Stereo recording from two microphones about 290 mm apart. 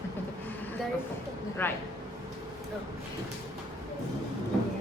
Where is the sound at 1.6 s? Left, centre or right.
Centre.